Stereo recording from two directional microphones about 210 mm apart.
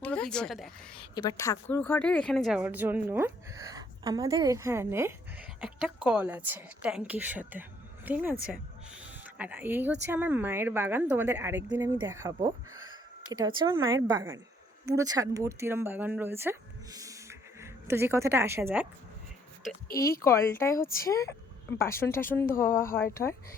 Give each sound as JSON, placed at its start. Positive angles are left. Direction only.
{"t": 0.0, "sound": "a woman's voice", "side_deg": 5}
{"t": 1.1, "sound": "a woman's voice", "side_deg": 20}
{"t": 19.9, "sound": "a woman's voice", "side_deg": 15}